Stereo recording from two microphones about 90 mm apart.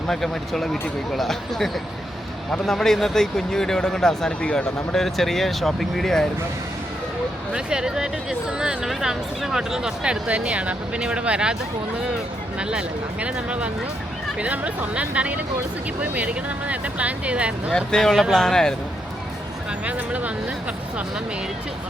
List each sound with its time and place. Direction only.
0.1 s speech: 5° left (ahead or behind)
7.5 s speech: 10° right (ahead or behind)
12.5 s speech: 10° right (ahead or behind)
17.7 s speech: 10° left (ahead or behind)
19.8 s speech: 15° right (ahead or behind)